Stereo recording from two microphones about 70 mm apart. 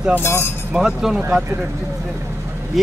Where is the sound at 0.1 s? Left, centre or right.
Left.